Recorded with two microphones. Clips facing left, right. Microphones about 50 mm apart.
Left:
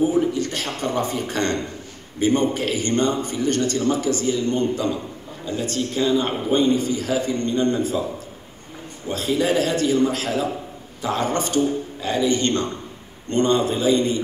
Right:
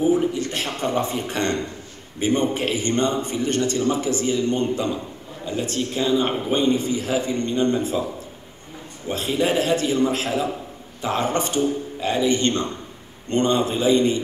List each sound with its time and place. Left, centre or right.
0.0 s a sound: right
2.1 s a man's voice: right
9.1 s a man's voice: right